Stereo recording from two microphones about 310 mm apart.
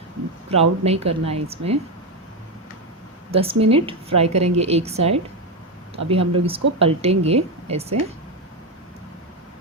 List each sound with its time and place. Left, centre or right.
0.5 s speech: centre
3.3 s speech: centre